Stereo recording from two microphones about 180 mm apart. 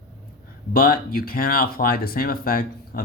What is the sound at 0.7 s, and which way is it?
Speech, 55° left (ahead or behind).